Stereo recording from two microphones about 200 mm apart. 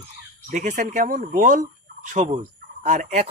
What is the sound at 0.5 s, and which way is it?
Speech, 35° right (ahead or behind).